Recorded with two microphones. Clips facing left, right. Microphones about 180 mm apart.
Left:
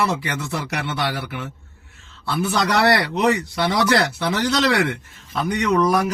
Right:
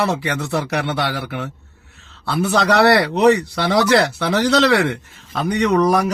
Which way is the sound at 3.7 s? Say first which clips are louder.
Right 5 dB; 50° right (ahead or behind).